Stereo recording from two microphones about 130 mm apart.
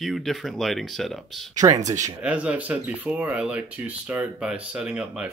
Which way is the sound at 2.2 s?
10° right (ahead or behind).